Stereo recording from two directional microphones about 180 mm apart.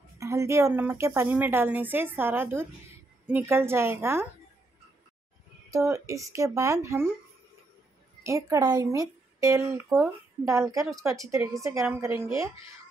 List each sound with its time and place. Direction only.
0.2 s a woman's voice: 15° right (ahead or behind)
5.7 s a woman's voice: 15° right (ahead or behind)
8.2 s a woman's voice: 15° right (ahead or behind)